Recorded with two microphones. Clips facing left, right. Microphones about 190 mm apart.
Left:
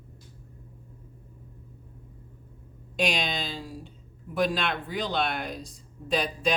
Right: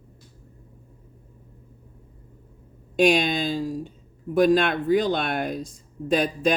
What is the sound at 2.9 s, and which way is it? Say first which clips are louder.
Speech: right 9 dB; 50° right (ahead or behind).